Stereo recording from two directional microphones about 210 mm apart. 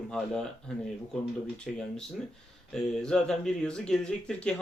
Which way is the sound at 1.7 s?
Centre (ahead or behind).